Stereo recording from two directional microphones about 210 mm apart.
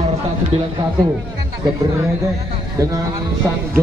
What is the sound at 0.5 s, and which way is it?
Speech, 30° right (ahead or behind).